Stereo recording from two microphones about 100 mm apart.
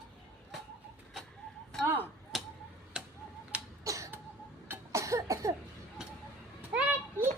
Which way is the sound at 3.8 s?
30° right (ahead or behind).